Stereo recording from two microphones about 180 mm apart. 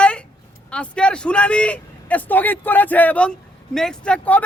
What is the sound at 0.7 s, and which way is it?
A man's voice, 5° left (ahead or behind).